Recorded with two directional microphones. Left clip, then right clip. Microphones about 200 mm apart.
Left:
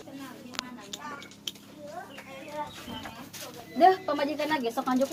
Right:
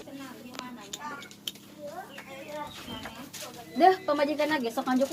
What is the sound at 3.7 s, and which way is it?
Speech, 25° right (ahead or behind).